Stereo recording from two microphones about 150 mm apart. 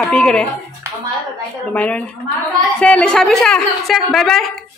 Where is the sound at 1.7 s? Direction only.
10° left (ahead or behind).